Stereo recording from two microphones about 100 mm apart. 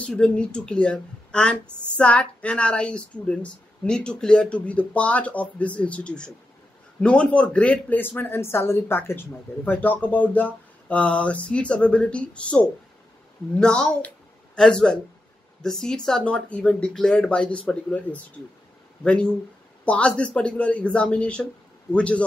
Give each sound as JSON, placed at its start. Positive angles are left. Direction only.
{"t": 0.0, "sound": "a woman's voice", "side_deg": 10}